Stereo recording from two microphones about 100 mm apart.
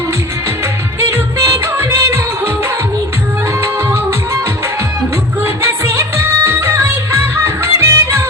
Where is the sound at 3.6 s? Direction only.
25° right (ahead or behind).